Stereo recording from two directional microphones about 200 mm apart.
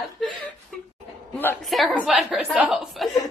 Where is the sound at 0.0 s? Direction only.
Centre (ahead or behind).